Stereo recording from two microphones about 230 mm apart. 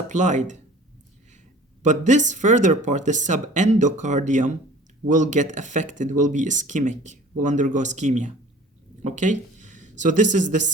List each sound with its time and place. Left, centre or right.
0.1 s speech: right
1.8 s speech: right